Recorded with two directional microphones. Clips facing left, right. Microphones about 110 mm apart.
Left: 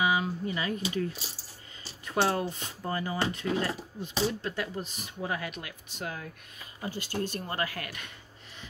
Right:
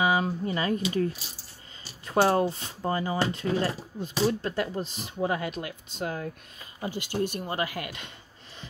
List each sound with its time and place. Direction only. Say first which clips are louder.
0.0 s speech: right 3 dB; 35° right (ahead or behind)
6.8 s speech: right 4 dB; 20° right (ahead or behind)